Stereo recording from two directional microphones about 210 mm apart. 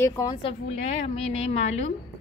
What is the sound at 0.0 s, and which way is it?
A woman's voice, 15° left (ahead or behind).